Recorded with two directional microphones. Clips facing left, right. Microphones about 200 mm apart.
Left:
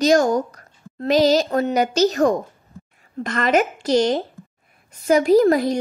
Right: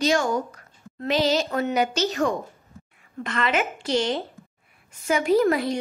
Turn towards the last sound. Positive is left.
turn(degrees=40)  # may be behind; listen again after turning